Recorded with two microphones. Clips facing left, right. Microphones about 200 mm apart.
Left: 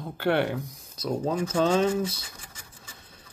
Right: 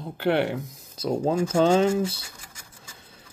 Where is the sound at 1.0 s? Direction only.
25° right (ahead or behind).